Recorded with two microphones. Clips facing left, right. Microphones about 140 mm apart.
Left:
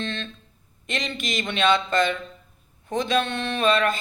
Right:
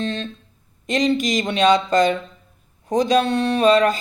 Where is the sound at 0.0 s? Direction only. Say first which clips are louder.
Right 6 dB; 40° right (ahead or behind).